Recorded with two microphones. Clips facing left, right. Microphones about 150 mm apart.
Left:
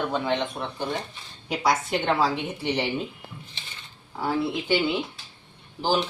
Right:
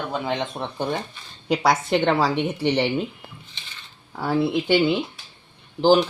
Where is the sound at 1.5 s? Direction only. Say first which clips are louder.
Right 4 dB; 80° right.